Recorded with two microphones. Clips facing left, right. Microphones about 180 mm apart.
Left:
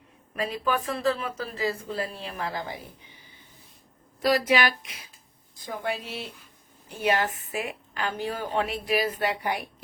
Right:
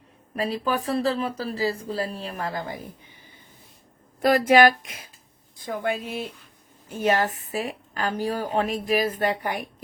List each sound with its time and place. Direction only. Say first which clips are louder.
0.3 s speech: right 2 dB; 35° right (ahead or behind)
4.2 s a woman's voice: right 6 dB; 50° right (ahead or behind)